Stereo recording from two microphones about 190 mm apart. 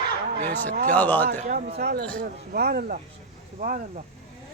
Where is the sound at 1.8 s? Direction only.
55° right (ahead or behind).